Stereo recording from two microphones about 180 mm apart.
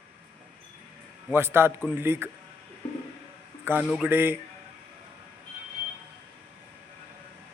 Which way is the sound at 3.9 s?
10° right (ahead or behind).